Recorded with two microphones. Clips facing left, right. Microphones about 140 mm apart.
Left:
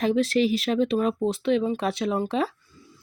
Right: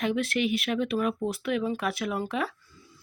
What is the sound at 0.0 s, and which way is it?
Speech, 30° left (ahead or behind).